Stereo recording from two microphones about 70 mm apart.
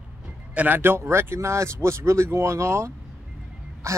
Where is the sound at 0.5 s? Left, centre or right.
Right.